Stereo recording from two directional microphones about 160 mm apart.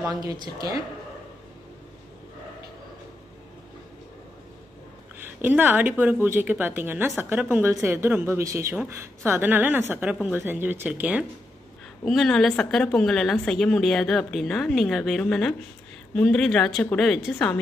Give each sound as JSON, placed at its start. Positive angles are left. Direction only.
{"t": 0.0, "sound": "speech", "side_deg": -25}
{"t": 5.4, "sound": "speech", "side_deg": -10}
{"t": 12.0, "sound": "speech", "side_deg": 5}